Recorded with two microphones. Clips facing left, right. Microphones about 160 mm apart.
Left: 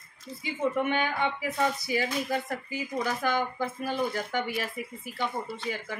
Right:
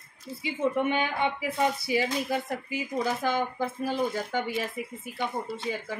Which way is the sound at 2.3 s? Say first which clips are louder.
Right 1 dB; 10° right (ahead or behind).